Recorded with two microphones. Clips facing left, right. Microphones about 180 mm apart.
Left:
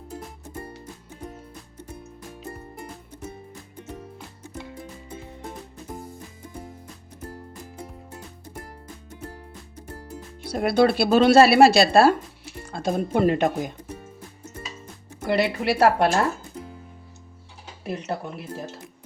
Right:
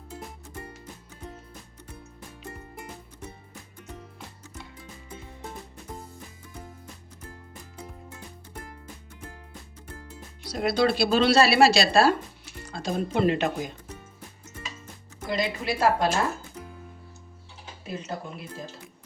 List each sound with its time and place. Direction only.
0.1 s music: 30° left (ahead or behind)
7.3 s music: 40° left (ahead or behind)
10.4 s speech: 55° left (ahead or behind)
15.2 s a woman's voice: 65° left (ahead or behind)
17.8 s a woman's voice: 65° left (ahead or behind)